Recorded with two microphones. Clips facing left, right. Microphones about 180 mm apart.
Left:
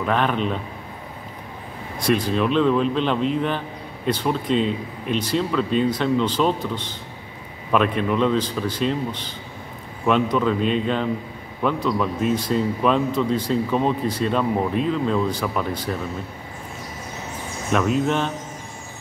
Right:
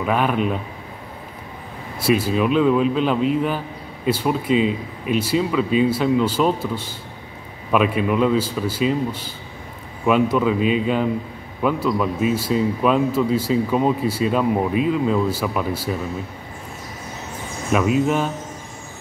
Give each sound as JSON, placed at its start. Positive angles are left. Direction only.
{"t": 0.0, "sound": "speech", "side_deg": -5}
{"t": 2.0, "sound": "speech", "side_deg": -5}
{"t": 17.7, "sound": "speech", "side_deg": -5}